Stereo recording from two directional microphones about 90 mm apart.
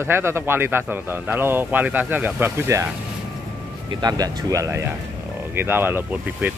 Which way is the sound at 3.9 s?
50° right (ahead or behind).